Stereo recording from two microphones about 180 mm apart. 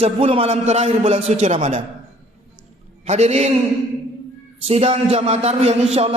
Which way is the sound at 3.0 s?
35° right (ahead or behind).